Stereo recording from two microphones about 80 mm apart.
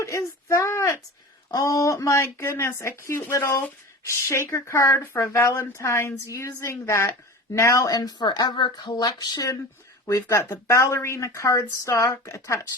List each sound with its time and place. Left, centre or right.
0.0 s child singing: left
1.5 s speech: left
10.4 s speech: left